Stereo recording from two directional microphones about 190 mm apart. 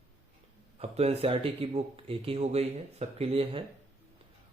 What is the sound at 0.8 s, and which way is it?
Speech, 30° right (ahead or behind).